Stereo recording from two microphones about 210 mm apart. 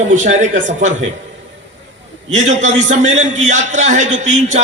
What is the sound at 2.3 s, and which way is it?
A man's voice, 35° right (ahead or behind).